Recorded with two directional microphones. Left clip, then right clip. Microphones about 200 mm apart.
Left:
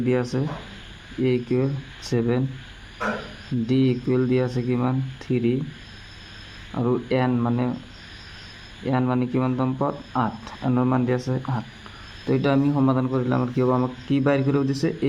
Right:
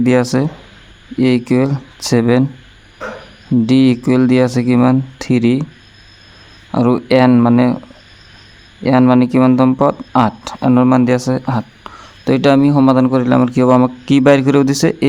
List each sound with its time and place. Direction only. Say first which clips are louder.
0.0 s speech: right 11 dB; 55° right (ahead or behind)
3.7 s speech: right 9 dB; 55° right (ahead or behind)
6.7 s speech: right 11 dB; 55° right (ahead or behind)
8.8 s speech: right 13 dB; 55° right (ahead or behind)